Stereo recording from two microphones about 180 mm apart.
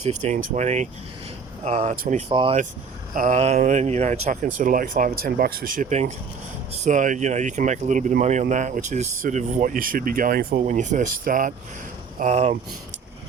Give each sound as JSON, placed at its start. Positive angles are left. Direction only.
{"t": 0.0, "sound": "speech", "side_deg": -40}
{"t": 2.3, "sound": "speech", "side_deg": -30}
{"t": 3.2, "sound": "speech", "side_deg": -40}